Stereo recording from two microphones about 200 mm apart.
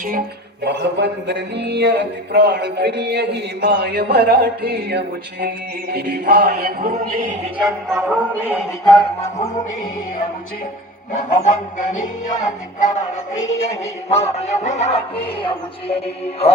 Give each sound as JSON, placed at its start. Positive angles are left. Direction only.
{"t": 0.6, "sound": "speech", "side_deg": -60}
{"t": 7.6, "sound": "a sound", "side_deg": 0}
{"t": 11.4, "sound": "speech", "side_deg": 40}
{"t": 14.1, "sound": "speech", "side_deg": 30}